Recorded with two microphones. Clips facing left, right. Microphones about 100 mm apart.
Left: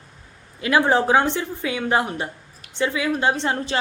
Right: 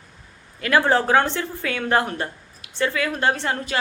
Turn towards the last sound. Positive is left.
turn(degrees=25)  # may be behind; listen again after turning